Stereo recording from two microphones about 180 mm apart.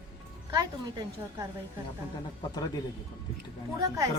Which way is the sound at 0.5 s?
20° right (ahead or behind).